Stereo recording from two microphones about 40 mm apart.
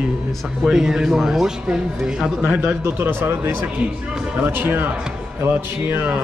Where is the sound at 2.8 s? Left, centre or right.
Right.